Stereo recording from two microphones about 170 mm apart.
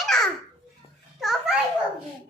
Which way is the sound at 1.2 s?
Centre (ahead or behind).